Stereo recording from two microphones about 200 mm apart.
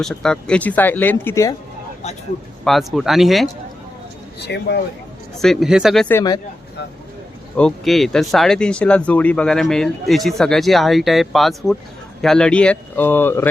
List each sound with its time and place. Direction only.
0.0 s speech: 5° left (ahead or behind)
2.6 s speech: centre (ahead or behind)
4.4 s speech: 55° left (ahead or behind)
5.4 s speech: centre (ahead or behind); by 6.4 s 15° left (ahead or behind)
7.5 s speech: 5° left (ahead or behind)